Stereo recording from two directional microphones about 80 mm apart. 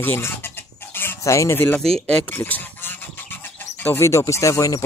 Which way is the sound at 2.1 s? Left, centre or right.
Centre.